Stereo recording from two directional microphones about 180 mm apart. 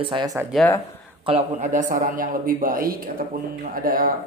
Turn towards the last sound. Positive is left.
turn(degrees=-50)  # may be behind; listen again after turning